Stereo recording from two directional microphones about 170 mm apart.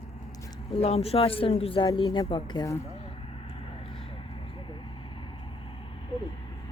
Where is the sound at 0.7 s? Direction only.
35° left (ahead or behind).